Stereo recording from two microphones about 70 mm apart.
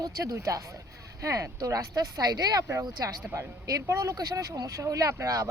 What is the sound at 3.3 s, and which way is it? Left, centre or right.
Speech, right.